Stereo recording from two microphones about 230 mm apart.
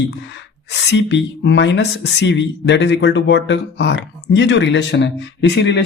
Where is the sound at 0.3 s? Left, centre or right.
Left.